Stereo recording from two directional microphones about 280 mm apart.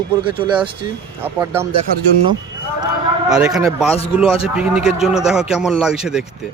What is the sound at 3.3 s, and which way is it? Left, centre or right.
Speech, centre.